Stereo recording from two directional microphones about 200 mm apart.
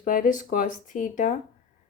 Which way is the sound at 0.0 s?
40° left (ahead or behind).